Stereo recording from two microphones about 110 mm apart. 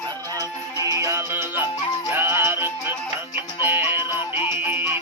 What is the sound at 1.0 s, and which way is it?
Music, 25° right (ahead or behind).